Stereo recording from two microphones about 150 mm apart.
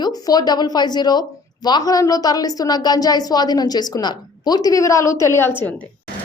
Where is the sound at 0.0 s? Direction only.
25° left (ahead or behind).